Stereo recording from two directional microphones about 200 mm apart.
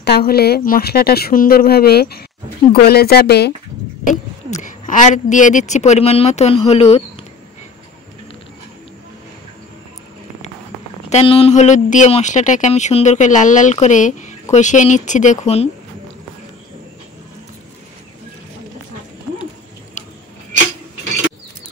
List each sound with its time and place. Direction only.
0.0 s speech: 55° left (ahead or behind)
4.1 s speech: 40° left (ahead or behind)
11.1 s speech: 30° left (ahead or behind)